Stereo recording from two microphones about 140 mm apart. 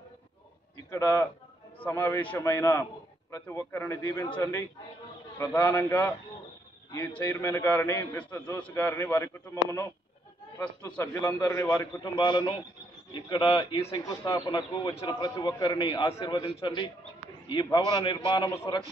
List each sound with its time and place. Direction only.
0.8 s a man's voice: 20° left (ahead or behind)
7.3 s a man's voice: 20° left (ahead or behind)
11.1 s a man's voice: 20° left (ahead or behind)
12.0 s a man's voice: 30° left (ahead or behind)
18.5 s a man's voice: 20° left (ahead or behind)